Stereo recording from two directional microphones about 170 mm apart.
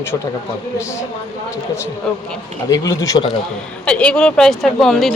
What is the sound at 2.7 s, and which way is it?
Speech, 20° left (ahead or behind).